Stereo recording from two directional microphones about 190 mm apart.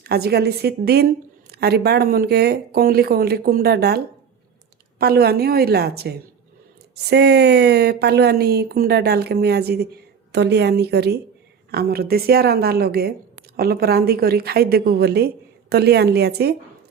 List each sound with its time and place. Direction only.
0.0 s speech: 55° right (ahead or behind)